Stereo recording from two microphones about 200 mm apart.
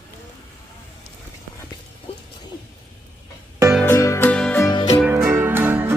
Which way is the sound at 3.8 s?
15° left (ahead or behind).